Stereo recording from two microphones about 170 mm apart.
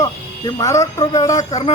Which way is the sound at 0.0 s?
20° left (ahead or behind).